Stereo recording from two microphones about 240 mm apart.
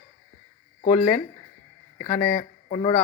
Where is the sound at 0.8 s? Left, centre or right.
Left.